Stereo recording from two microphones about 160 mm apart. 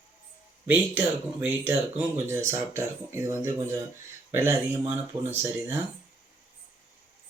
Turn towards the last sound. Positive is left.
turn(degrees=-15)  # may be behind; listen again after turning